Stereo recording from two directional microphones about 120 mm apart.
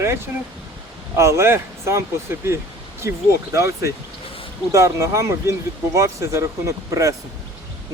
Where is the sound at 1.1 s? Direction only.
25° right (ahead or behind).